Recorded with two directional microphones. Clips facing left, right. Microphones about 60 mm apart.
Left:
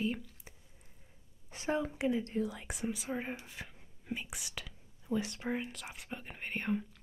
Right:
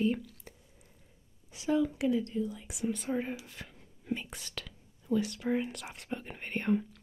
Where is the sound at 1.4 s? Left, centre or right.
Left.